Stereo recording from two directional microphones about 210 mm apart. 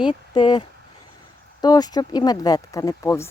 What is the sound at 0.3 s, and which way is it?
Speech, 20° left (ahead or behind).